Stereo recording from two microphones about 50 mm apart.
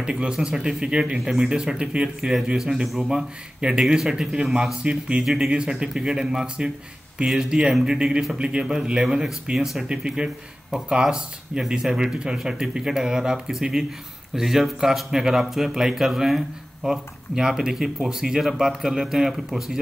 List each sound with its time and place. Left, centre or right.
0.0 s speech: centre
1.2 s speech: centre
1.6 s speech: centre
3.2 s speech: centre